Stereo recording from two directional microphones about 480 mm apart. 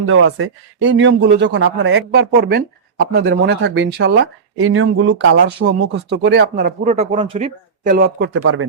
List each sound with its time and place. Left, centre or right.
0.0 s speech: right